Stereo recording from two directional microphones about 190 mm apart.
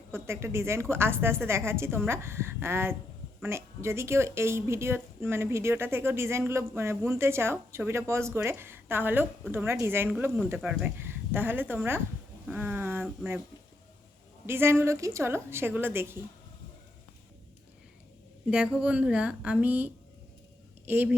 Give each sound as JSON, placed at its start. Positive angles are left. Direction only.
{"t": 0.1, "sound": "a woman's voice", "side_deg": -15}
{"t": 14.4, "sound": "a woman's voice", "side_deg": -10}
{"t": 18.5, "sound": "a woman's voice", "side_deg": -5}